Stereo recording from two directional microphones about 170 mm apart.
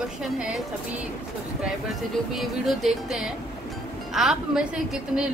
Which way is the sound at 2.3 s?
Centre (ahead or behind).